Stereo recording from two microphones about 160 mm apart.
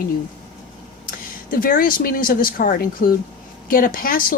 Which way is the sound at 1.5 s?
60° left (ahead or behind).